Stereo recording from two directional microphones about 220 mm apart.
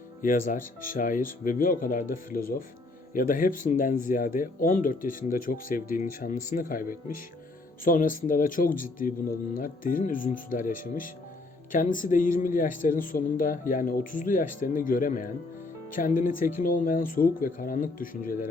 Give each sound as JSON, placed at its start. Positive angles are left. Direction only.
{"t": 0.2, "sound": "speech", "side_deg": 40}